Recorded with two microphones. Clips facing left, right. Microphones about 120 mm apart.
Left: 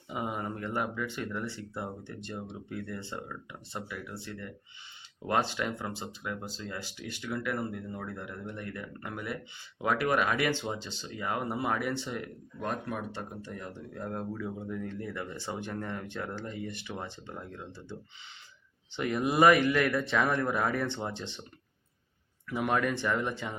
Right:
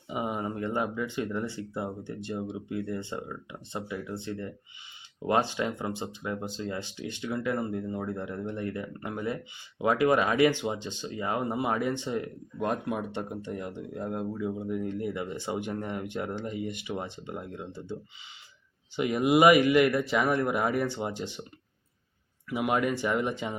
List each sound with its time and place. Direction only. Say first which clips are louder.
0.1 s speech: right 3 dB; 15° right (ahead or behind)
5.2 s speech: right 3 dB; 15° right (ahead or behind)
18.9 s speech: right 4 dB; 15° right (ahead or behind)
22.4 s speech: right 2 dB; 10° right (ahead or behind)